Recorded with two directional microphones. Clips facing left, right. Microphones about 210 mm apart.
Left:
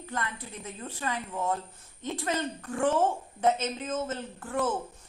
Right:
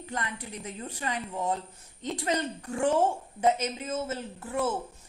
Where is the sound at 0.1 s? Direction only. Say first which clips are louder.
Even; 15° right (ahead or behind).